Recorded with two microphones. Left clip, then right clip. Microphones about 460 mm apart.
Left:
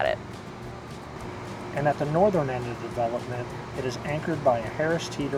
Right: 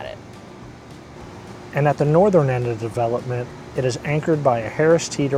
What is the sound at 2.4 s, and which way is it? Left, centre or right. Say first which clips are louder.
Speech: right 9 dB; right.